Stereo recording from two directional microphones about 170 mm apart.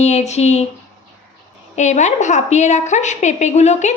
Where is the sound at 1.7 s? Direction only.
45° left (ahead or behind).